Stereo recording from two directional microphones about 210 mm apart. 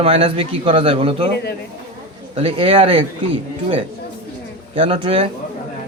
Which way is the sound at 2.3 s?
25° right (ahead or behind).